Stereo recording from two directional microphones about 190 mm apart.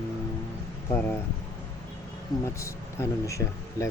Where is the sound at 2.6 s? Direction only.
15° left (ahead or behind).